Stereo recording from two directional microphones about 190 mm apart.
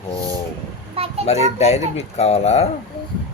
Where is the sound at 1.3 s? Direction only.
35° left (ahead or behind).